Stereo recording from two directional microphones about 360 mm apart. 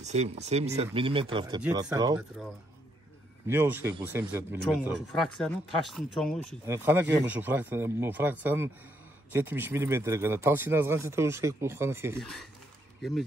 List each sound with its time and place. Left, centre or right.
0.0 s speech: centre